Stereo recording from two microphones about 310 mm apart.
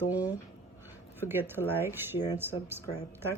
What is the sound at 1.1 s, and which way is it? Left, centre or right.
A woman's voice, centre.